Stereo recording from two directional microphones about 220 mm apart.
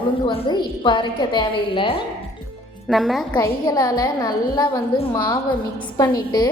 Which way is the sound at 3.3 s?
15° left (ahead or behind).